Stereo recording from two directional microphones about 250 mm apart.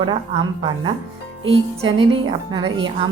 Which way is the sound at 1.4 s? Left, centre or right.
Right.